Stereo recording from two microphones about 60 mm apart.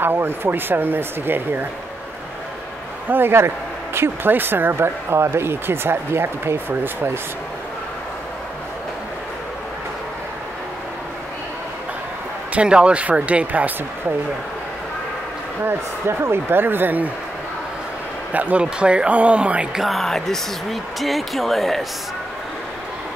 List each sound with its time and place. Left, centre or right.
0.0 s speech: right
3.1 s speech: right
12.5 s speech: centre
15.6 s speech: right
18.3 s speech: right
19.8 s speech: centre